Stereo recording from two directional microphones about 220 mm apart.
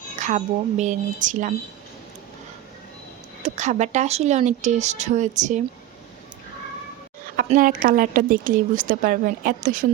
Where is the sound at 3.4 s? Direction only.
35° right (ahead or behind).